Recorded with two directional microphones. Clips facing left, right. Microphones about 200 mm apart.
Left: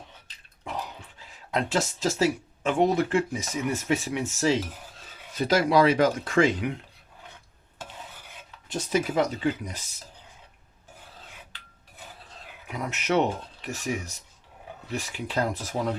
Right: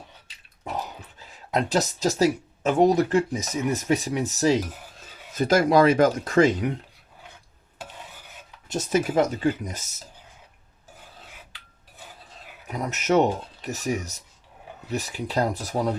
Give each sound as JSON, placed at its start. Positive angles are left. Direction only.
{"t": 1.5, "sound": "speech", "side_deg": -40}
{"t": 8.7, "sound": "speech", "side_deg": -45}
{"t": 12.6, "sound": "speech", "side_deg": -40}